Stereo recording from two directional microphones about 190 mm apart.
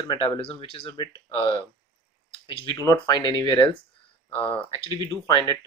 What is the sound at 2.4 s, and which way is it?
Speech, 20° left (ahead or behind).